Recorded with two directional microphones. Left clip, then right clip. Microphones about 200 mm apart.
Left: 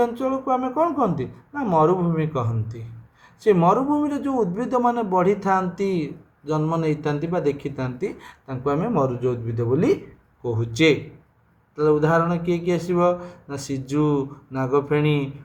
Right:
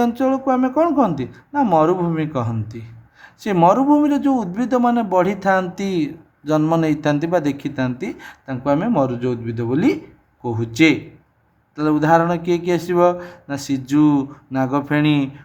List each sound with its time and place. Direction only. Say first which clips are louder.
0.2 s a man's voice: right 5 dB; 50° right (ahead or behind)
11.8 s a man's voice: right 3 dB; 50° right (ahead or behind)